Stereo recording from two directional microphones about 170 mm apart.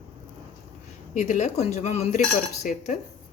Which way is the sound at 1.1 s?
45° left (ahead or behind).